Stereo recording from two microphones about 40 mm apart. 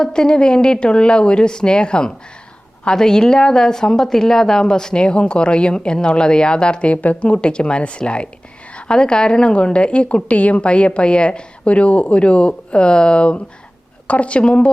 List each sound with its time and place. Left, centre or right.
0.0 s a woman's voice: centre
6.9 s a woman's voice: left